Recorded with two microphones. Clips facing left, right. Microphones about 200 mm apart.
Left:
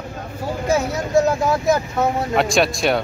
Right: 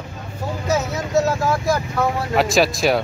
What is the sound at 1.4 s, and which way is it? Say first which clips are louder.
Speech: left 2 dB; 20° left (ahead or behind).